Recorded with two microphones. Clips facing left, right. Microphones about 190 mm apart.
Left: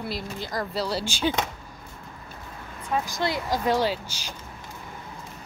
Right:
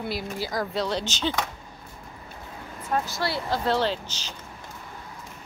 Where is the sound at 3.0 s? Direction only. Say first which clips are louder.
Left 1 dB; 15° left (ahead or behind).